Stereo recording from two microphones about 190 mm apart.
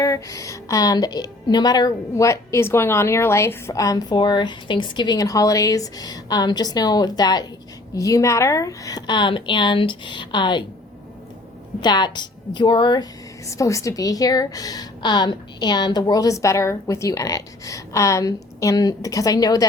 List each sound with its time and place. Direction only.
0.0 s a woman's voice: 15° left (ahead or behind)
11.8 s a woman's voice: 25° left (ahead or behind)